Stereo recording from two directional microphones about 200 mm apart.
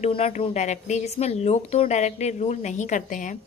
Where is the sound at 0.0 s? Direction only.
30° left (ahead or behind).